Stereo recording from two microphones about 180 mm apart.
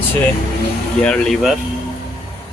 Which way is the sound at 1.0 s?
5° left (ahead or behind).